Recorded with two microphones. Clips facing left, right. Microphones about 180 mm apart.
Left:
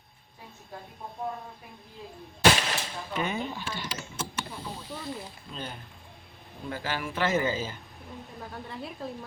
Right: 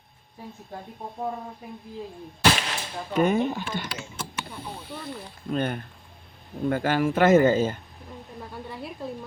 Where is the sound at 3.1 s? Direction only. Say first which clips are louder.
Right 10 dB; 45° right (ahead or behind).